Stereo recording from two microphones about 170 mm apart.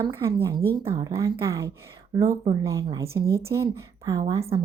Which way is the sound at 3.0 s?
15° right (ahead or behind).